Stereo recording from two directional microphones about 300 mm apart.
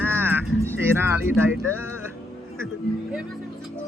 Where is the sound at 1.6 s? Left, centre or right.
Left.